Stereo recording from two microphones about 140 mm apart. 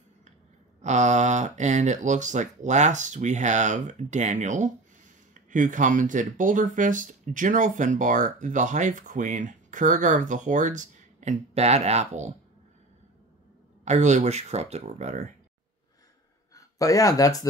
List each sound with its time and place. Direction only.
0.8 s speech: 55° right (ahead or behind)
13.8 s speech: 60° right (ahead or behind)
16.5 s speech: 25° left (ahead or behind)